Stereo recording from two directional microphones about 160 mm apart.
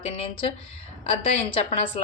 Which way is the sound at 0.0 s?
35° left (ahead or behind).